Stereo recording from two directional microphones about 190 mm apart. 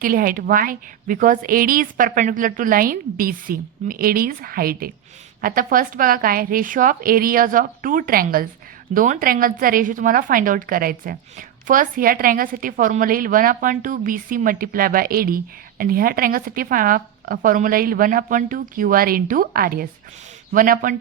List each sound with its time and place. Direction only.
0.0 s speech: 50° right (ahead or behind)